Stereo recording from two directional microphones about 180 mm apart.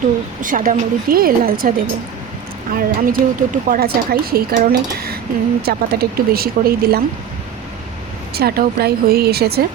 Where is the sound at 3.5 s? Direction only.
50° right (ahead or behind).